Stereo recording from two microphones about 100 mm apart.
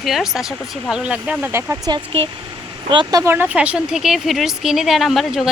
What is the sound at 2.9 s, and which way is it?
Speech, 50° right (ahead or behind).